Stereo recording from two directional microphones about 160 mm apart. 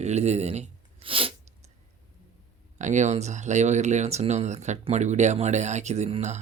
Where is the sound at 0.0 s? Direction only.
45° right (ahead or behind).